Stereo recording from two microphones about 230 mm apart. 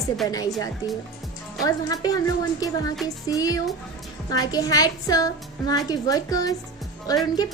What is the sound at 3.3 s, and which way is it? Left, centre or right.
A woman's voice, centre.